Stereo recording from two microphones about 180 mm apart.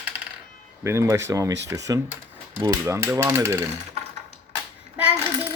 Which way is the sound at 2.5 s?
15° right (ahead or behind).